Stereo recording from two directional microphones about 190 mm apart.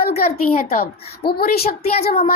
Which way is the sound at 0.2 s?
50° left (ahead or behind).